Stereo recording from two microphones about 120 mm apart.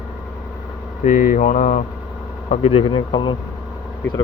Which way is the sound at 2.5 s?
55° left (ahead or behind).